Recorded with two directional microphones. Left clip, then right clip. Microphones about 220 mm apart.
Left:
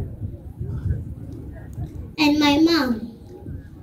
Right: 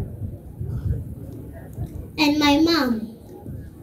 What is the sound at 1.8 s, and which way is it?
A woman's voice, 25° right (ahead or behind).